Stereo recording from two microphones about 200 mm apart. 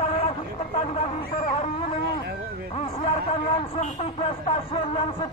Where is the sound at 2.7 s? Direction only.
30° left (ahead or behind).